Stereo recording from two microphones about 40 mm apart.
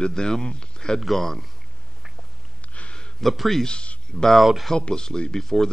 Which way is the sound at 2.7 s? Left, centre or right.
Left.